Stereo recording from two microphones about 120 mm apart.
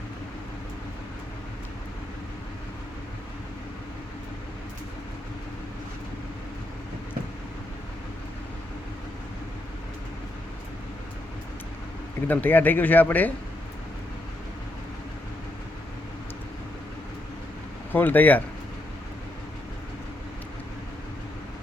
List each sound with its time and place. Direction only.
12.3 s speech: 15° left (ahead or behind)
17.9 s speech: 15° left (ahead or behind)